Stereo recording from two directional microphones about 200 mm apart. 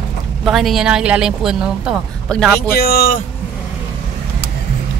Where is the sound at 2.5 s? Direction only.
50° left (ahead or behind).